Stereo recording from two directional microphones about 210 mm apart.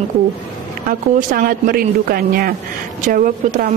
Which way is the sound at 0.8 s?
45° right (ahead or behind).